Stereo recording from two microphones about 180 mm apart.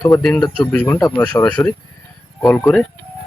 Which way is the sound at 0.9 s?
15° left (ahead or behind).